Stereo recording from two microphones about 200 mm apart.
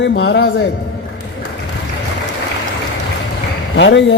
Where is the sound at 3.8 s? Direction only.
60° left (ahead or behind).